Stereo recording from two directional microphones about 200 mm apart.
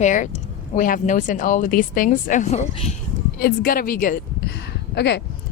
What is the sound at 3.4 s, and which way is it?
Speech, 45° left (ahead or behind).